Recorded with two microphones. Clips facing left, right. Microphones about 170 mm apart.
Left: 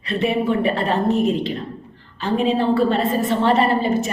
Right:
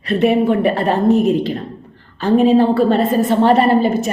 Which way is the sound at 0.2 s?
45° right (ahead or behind).